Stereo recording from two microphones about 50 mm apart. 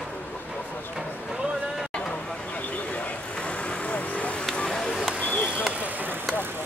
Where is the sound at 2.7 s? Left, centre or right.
Left.